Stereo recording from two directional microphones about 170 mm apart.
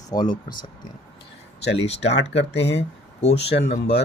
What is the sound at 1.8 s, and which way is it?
Speech, 35° left (ahead or behind).